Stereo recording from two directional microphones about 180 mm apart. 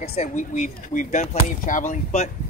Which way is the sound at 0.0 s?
35° left (ahead or behind).